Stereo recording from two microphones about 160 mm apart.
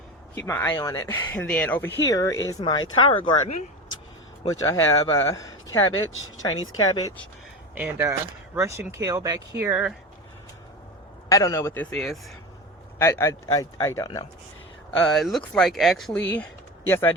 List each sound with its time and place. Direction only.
0.3 s speech: 15° left (ahead or behind); by 3.3 s 30° left (ahead or behind)
4.4 s speech: 20° left (ahead or behind)
7.8 s speech: 15° right (ahead or behind)
11.3 s speech: 20° left (ahead or behind); by 12.2 s centre (ahead or behind)
13.0 s speech: 20° left (ahead or behind)
14.8 s speech: 5° left (ahead or behind)